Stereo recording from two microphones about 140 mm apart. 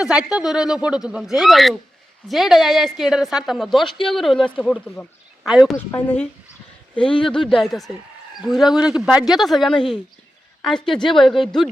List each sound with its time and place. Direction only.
0.0 s a woman's voice: 5° right (ahead or behind)
5.9 s speech: 15° left (ahead or behind)
6.9 s a woman's voice: 5° left (ahead or behind)